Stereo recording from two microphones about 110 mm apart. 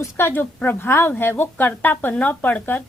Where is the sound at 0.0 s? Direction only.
20° left (ahead or behind).